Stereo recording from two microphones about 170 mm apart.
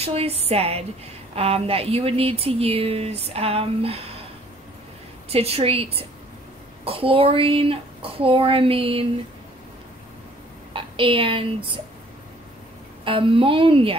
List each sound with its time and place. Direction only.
0.0 s speech: 35° right (ahead or behind)
5.3 s speech: 35° right (ahead or behind)
10.7 s a woman's voice: 30° right (ahead or behind)
13.0 s speech: 30° right (ahead or behind)